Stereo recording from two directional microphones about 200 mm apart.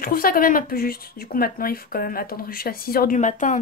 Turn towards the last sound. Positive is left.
turn(degrees=40)  # may be behind; listen again after turning